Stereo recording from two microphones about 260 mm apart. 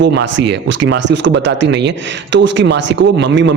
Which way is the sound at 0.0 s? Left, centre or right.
Right.